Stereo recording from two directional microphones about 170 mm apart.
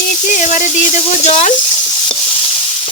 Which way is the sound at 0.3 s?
45° left (ahead or behind).